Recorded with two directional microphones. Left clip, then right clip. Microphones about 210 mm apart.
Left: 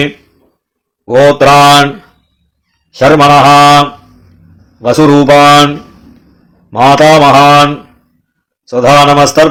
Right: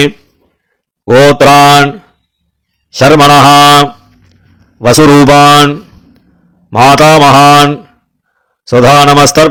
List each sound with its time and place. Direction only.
1.2 s mantra: 40° right (ahead or behind)